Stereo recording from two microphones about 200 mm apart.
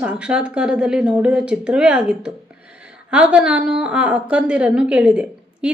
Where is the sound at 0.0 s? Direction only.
5° right (ahead or behind).